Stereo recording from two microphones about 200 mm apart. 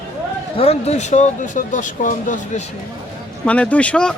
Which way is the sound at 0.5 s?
30° left (ahead or behind).